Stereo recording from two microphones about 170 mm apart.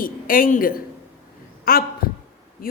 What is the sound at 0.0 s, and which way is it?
A woman's voice, 55° left (ahead or behind).